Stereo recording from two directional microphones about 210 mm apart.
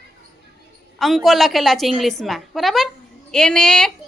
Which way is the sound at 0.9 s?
Centre (ahead or behind).